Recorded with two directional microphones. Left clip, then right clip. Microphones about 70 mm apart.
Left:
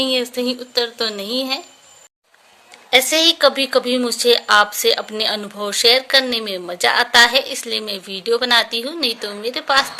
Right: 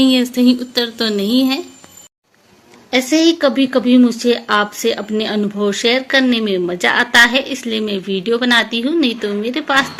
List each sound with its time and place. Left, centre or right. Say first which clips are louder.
0.0 s speech: right 5 dB; centre
2.9 s speech: even; left